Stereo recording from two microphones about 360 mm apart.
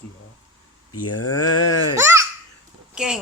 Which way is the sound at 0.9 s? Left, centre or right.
Left.